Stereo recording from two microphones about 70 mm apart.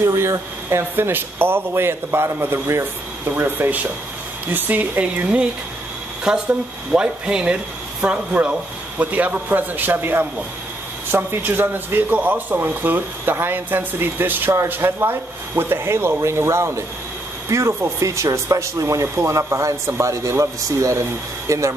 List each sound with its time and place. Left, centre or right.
0.0 s speech: right